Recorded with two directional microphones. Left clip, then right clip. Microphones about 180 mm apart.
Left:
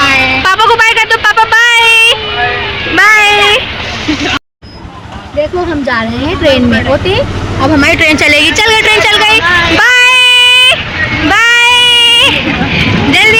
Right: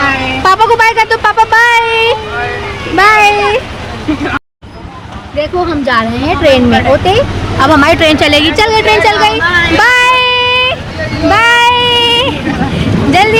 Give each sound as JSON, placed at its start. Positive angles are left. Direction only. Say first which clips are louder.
{"t": 0.4, "sound": "a sound", "louder": "right 3 dB", "side_deg": -10}
{"t": 2.9, "sound": "vehicle", "louder": "left 1 dB", "side_deg": -10}
{"t": 5.4, "sound": "speech", "louder": "even", "side_deg": -20}
{"t": 7.6, "sound": "a woman's voice", "louder": "right 2 dB", "side_deg": -45}
{"t": 7.9, "sound": "speech", "louder": "left 1 dB", "side_deg": -30}
{"t": 8.2, "sound": "a woman's voice", "louder": "left 1 dB", "side_deg": -15}
{"t": 8.7, "sound": "speech", "louder": "left 1 dB", "side_deg": -5}
{"t": 11.3, "sound": "baby cry", "louder": "even", "side_deg": -5}
{"t": 12.7, "sound": "vehicle", "louder": "left 1 dB", "side_deg": -25}